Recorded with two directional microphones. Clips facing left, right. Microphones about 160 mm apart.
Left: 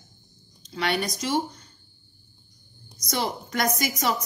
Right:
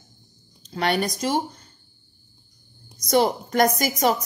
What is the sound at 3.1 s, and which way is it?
A woman's voice, 45° right (ahead or behind).